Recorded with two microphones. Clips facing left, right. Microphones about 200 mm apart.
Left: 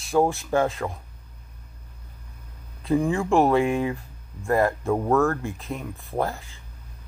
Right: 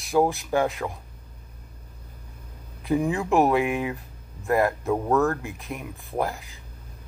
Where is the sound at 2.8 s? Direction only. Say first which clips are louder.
Left 1 dB; 20° right (ahead or behind).